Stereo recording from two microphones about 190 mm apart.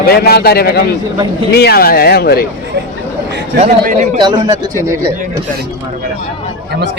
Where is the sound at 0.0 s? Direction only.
55° left (ahead or behind).